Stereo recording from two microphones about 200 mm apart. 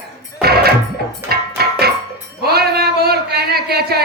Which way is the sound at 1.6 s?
50° right (ahead or behind).